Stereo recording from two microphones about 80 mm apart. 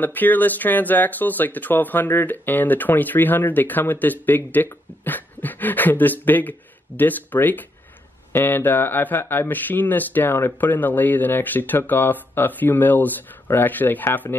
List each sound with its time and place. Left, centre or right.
0.0 s speech: left